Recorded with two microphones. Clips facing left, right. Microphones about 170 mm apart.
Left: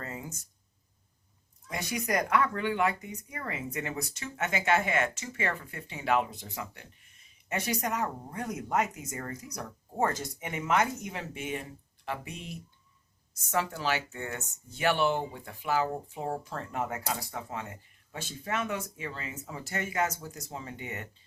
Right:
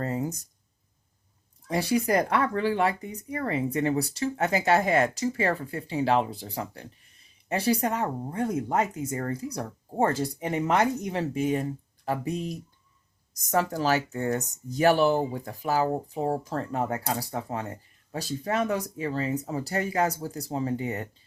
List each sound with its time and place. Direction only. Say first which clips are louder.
0.0 s speech: right 11 dB; 35° right (ahead or behind)
1.6 s speech: right 9 dB; 30° right (ahead or behind)